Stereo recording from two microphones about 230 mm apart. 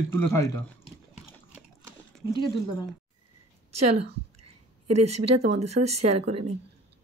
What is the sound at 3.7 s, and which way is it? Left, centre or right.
Speech, right.